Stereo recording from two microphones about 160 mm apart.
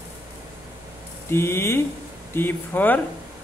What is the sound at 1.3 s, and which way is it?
Speech, 15° left (ahead or behind).